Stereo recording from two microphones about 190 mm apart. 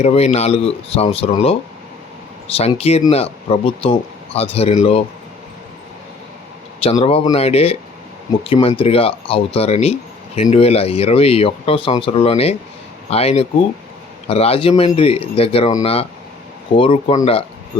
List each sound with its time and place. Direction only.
0.0 s speech: 35° left (ahead or behind)
7.0 s speech: 30° left (ahead or behind)